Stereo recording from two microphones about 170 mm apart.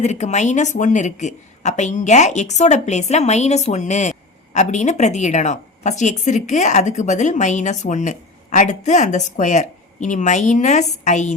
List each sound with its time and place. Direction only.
0.0 s a woman's voice: 40° left (ahead or behind)